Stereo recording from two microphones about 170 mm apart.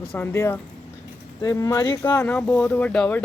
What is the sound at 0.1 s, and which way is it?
Speech, 15° left (ahead or behind).